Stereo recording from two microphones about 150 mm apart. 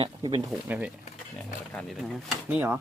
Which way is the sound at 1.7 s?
5° left (ahead or behind).